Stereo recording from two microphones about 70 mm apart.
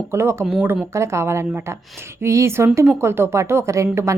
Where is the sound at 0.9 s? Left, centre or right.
Right.